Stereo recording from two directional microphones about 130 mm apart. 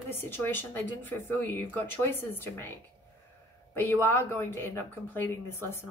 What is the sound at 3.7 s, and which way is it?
Speech, 15° left (ahead or behind).